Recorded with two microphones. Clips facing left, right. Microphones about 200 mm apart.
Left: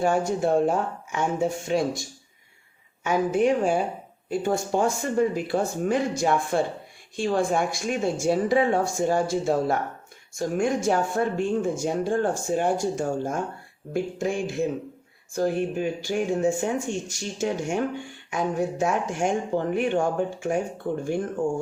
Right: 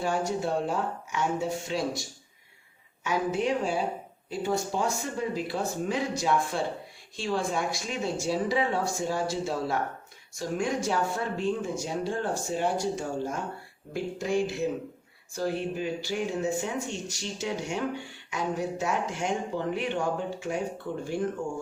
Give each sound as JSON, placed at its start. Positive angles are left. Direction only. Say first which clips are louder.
{"t": 0.0, "sound": "speech", "louder": "left 6 dB", "side_deg": 50}
{"t": 3.0, "sound": "speech", "louder": "left 6 dB", "side_deg": 50}